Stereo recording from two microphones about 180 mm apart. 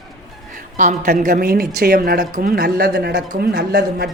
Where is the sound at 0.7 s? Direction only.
45° right (ahead or behind).